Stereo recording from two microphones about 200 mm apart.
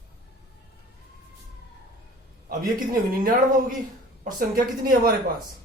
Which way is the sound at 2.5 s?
45° right (ahead or behind).